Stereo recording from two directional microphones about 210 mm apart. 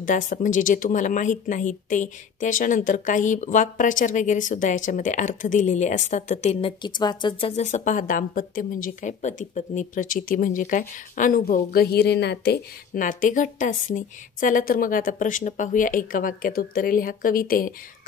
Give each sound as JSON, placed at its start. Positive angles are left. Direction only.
{"t": 0.0, "sound": "speech", "side_deg": 35}